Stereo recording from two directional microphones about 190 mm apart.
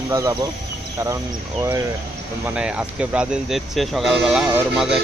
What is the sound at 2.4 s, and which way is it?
Speech, 5° right (ahead or behind).